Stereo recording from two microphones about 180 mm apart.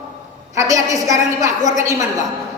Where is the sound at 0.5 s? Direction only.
20° right (ahead or behind).